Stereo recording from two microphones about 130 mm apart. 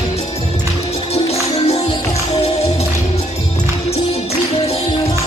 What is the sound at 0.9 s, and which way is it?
Music, 55° left (ahead or behind).